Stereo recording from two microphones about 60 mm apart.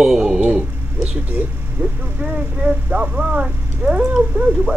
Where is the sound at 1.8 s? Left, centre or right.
Right.